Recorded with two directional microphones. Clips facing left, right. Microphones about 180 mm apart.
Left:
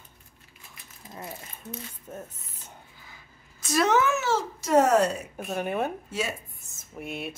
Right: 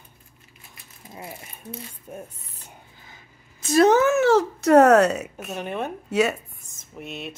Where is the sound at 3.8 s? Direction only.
40° right (ahead or behind); by 5.2 s 70° right (ahead or behind).